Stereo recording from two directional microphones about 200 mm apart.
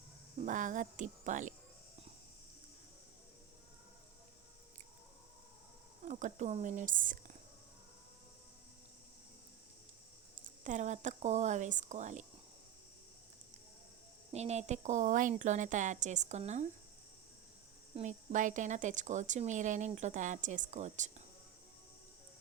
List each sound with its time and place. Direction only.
0.3 s speech: 40° right (ahead or behind)
6.1 s speech: 40° right (ahead or behind)
10.4 s speech: 40° right (ahead or behind)
14.3 s speech: 35° right (ahead or behind)
17.9 s speech: 35° right (ahead or behind)